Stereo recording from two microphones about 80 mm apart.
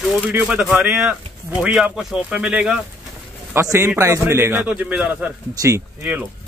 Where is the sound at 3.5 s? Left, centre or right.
Right; by 5.3 s centre.